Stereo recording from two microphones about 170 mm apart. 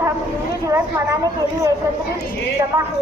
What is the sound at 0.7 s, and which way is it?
Speech, 15° right (ahead or behind).